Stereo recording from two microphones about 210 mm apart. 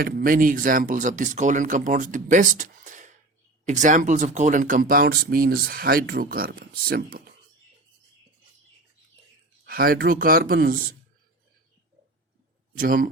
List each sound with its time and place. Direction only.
0.0 s speech: 40° right (ahead or behind)
9.6 s speech: 45° right (ahead or behind)
12.7 s speech: 45° right (ahead or behind)